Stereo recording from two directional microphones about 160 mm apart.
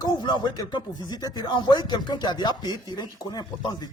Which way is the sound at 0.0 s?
30° left (ahead or behind).